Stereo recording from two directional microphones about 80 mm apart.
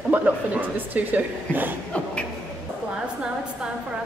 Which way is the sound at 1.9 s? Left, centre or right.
Centre.